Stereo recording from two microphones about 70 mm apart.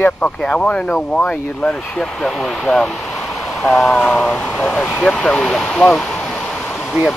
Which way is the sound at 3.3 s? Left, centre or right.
Centre.